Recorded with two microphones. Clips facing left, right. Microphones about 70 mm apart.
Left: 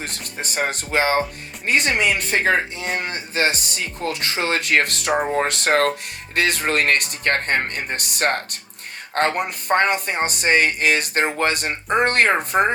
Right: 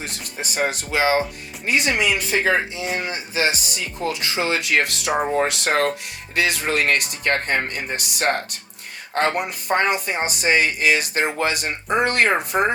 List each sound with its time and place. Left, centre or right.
0.0 s speech: left